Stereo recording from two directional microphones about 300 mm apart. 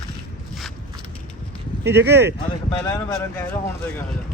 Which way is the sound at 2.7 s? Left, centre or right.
Centre.